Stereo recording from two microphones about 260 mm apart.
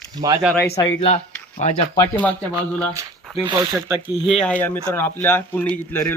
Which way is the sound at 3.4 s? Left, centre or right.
Centre.